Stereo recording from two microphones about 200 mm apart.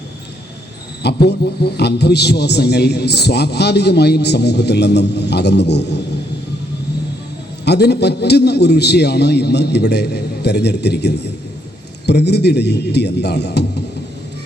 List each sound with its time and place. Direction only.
1.0 s a man's voice: 55° left (ahead or behind)
7.6 s a man's voice: 55° left (ahead or behind)